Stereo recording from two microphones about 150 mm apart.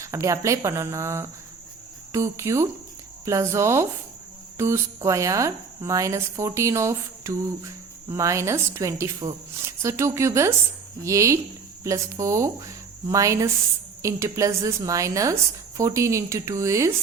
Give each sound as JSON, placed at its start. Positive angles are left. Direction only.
{"t": 0.0, "sound": "a woman's voice", "side_deg": -20}